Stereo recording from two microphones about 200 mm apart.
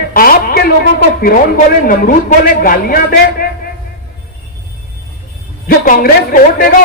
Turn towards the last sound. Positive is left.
turn(degrees=45)  # may be behind; listen again after turning